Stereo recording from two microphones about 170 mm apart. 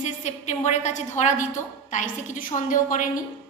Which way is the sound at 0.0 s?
45° left (ahead or behind).